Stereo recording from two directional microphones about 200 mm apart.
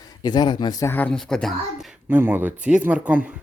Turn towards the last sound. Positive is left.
turn(degrees=-5)  # may be behind; listen again after turning